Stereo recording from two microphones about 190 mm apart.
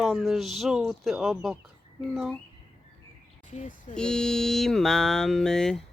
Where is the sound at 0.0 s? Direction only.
Centre (ahead or behind).